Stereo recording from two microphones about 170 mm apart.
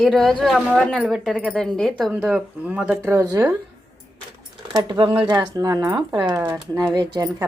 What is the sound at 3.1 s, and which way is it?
Speech, 15° right (ahead or behind).